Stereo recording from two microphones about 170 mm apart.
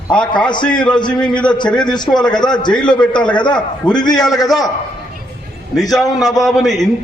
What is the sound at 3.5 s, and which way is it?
Speech, 5° left (ahead or behind).